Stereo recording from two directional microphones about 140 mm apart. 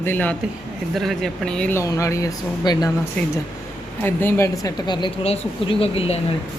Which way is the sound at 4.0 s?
15° left (ahead or behind).